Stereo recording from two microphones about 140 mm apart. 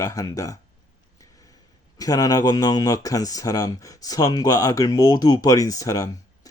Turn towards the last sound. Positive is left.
turn(degrees=25)  # may be behind; listen again after turning